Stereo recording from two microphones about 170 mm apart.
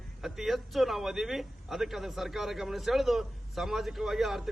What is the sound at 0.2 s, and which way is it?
Speech, centre (ahead or behind).